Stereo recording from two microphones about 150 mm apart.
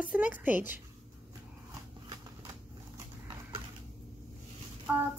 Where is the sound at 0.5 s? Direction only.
15° right (ahead or behind).